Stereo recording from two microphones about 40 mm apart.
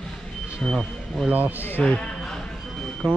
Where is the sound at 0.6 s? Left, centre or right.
Centre.